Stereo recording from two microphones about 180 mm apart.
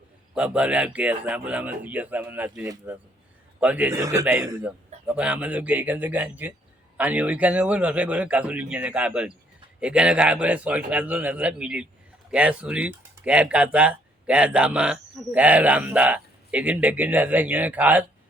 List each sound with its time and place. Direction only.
0.3 s speech: 5° right (ahead or behind)